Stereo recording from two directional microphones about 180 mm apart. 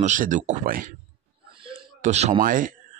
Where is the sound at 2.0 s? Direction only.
40° right (ahead or behind).